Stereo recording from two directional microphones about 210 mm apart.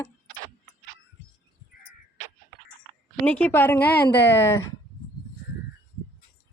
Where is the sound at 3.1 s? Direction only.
5° left (ahead or behind).